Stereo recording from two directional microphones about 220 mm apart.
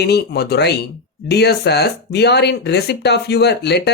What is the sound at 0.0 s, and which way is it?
Speech, 50° left (ahead or behind).